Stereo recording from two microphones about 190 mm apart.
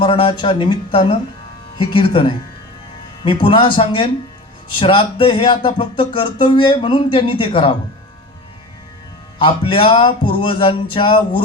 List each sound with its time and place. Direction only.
0.0 s music: 25° left (ahead or behind)
9.4 s music: 25° left (ahead or behind)